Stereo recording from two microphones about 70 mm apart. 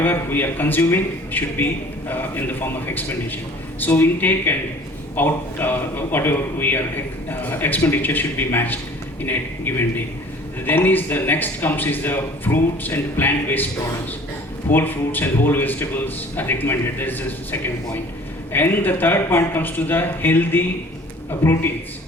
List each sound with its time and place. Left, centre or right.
0.0 s a man's voice: left
14.7 s a man's voice: left